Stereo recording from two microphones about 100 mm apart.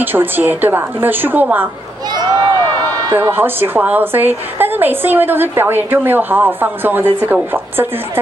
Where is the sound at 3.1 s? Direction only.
20° right (ahead or behind).